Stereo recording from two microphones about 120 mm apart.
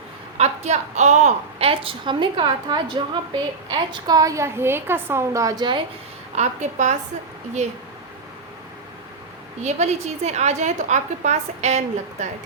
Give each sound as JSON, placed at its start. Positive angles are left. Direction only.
{"t": 0.3, "sound": "a woman's voice", "side_deg": -65}
{"t": 6.3, "sound": "a woman's voice", "side_deg": -75}
{"t": 9.6, "sound": "a woman's voice", "side_deg": -65}